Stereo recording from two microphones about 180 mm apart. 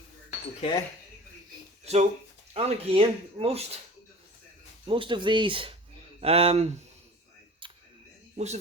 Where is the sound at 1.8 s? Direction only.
35° right (ahead or behind).